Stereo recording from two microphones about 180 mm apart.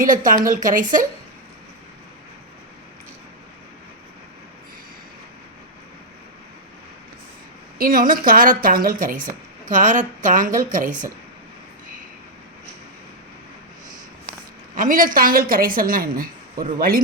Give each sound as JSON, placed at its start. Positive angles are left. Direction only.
{"t": 0.0, "sound": "a woman's voice", "side_deg": -45}
{"t": 7.8, "sound": "a woman's voice", "side_deg": -50}
{"t": 14.8, "sound": "a woman's voice", "side_deg": -50}